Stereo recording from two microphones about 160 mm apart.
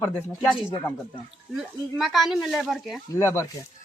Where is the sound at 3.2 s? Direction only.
15° left (ahead or behind).